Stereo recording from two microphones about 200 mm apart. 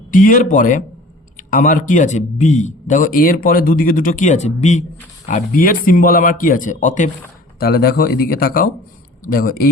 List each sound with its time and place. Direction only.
0.1 s a man's voice: 40° left (ahead or behind)
7.6 s a man's voice: 50° left (ahead or behind)